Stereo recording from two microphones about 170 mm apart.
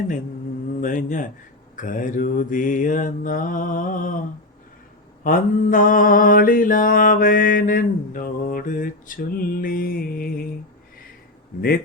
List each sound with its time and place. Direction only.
0.8 s mantra: 50° left (ahead or behind)
5.2 s mantra: 50° left (ahead or behind)